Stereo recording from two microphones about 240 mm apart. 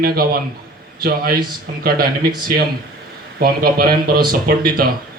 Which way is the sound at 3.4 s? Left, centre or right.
Right.